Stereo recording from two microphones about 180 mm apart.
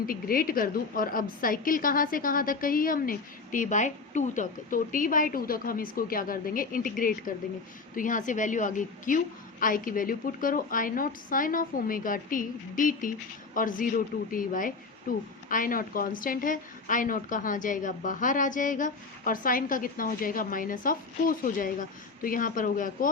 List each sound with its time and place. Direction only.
0.0 s a woman's voice: 50° left (ahead or behind)